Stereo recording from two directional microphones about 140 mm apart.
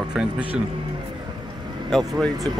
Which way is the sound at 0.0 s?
5° right (ahead or behind).